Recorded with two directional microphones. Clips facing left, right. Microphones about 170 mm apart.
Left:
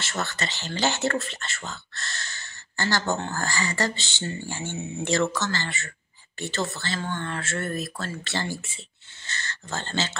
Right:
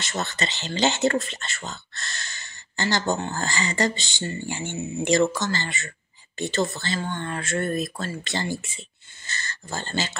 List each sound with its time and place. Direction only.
0.0 s speech: 20° right (ahead or behind)